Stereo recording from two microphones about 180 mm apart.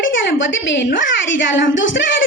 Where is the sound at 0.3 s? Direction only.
90° left.